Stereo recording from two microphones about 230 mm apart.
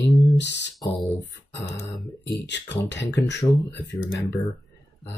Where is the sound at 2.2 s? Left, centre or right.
Left.